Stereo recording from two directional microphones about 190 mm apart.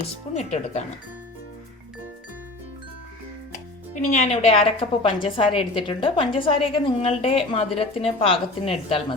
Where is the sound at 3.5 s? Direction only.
40° left (ahead or behind).